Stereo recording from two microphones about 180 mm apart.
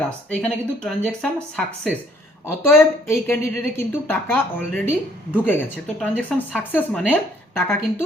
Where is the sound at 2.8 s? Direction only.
15° left (ahead or behind).